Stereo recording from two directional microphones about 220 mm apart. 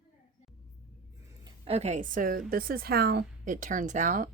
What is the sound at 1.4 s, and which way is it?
A woman's voice, 25° right (ahead or behind).